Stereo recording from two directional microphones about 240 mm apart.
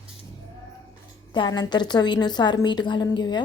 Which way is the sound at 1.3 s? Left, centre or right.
Centre.